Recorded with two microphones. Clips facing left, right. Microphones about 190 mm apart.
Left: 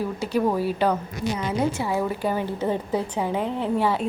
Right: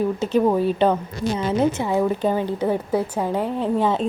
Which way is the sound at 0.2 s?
20° right (ahead or behind).